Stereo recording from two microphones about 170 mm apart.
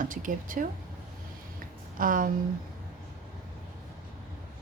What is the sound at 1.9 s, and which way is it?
Speech, 55° right (ahead or behind).